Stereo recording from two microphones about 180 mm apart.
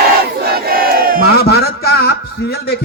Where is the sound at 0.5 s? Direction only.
55° right (ahead or behind).